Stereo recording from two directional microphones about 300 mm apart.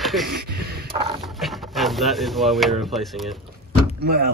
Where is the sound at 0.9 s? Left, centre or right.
Centre.